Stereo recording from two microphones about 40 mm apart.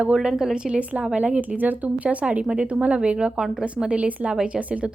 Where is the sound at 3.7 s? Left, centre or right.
Right.